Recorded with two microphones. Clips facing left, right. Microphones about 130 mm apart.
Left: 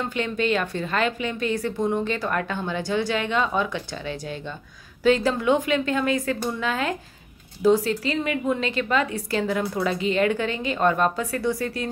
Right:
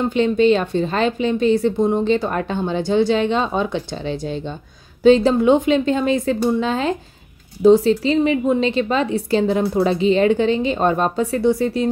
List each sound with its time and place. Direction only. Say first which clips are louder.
0.1 s a woman's voice: right 10 dB; 25° right (ahead or behind)